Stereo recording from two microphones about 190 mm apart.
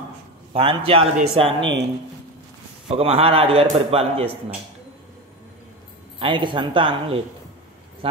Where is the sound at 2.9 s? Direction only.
30° right (ahead or behind).